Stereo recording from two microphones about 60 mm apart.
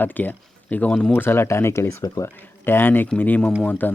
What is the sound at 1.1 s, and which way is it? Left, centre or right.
Speech, left.